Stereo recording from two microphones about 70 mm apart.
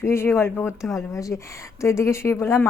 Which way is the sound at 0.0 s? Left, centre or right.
Left.